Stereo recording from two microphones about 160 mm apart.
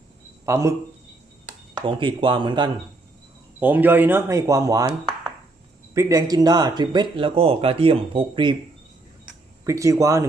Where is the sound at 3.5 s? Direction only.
10° right (ahead or behind); by 8.6 s 30° right (ahead or behind).